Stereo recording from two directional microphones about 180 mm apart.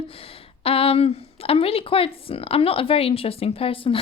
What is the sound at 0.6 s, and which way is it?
Speech, 30° left (ahead or behind).